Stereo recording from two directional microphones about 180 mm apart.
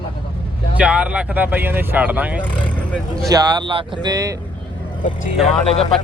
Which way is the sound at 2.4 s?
5° left (ahead or behind).